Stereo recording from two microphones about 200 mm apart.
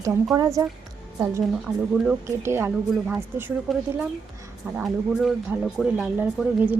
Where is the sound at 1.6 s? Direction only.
10° right (ahead or behind).